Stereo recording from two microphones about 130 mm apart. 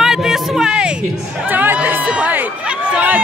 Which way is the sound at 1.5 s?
10° right (ahead or behind).